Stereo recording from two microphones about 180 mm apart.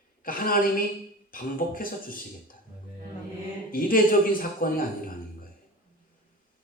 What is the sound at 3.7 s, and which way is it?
A man's voice, 50° left (ahead or behind).